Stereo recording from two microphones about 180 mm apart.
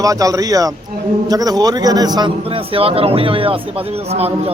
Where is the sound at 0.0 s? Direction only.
20° right (ahead or behind).